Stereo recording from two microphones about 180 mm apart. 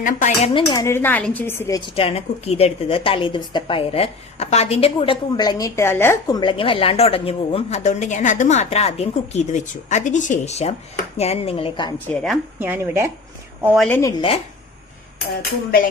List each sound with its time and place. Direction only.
0.0 s speech: 45° left (ahead or behind)
0.5 s speech: 25° left (ahead or behind)
0.9 s a woman's voice: 10° left (ahead or behind)
2.0 s a woman's voice: 35° left (ahead or behind)
11.9 s speech: 5° left (ahead or behind)
12.5 s speech: 10° right (ahead or behind)
13.7 s a woman's voice: 10° left (ahead or behind)
14.2 s a woman's voice: 30° left (ahead or behind)
15.4 s speech: 55° left (ahead or behind)